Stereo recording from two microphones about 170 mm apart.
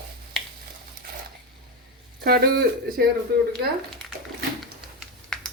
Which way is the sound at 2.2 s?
65° right (ahead or behind).